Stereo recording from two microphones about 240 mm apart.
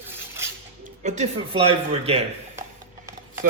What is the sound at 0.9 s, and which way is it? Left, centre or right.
A man's voice, right.